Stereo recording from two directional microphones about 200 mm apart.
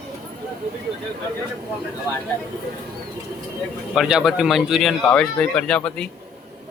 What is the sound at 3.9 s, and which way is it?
Speech, 5° right (ahead or behind).